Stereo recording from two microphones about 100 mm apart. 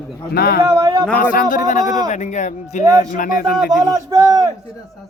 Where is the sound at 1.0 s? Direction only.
15° left (ahead or behind).